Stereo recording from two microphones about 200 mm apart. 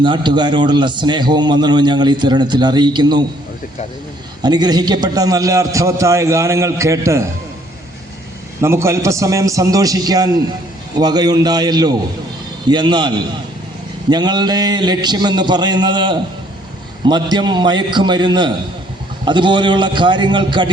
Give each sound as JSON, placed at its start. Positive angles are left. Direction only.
{"t": 0.0, "sound": "a man's voice", "side_deg": -25}
{"t": 4.4, "sound": "a man's voice", "side_deg": -20}
{"t": 8.6, "sound": "a man's voice", "side_deg": -15}